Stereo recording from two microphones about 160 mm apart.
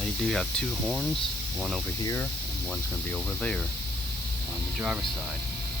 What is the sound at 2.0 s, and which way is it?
Speech, 20° left (ahead or behind).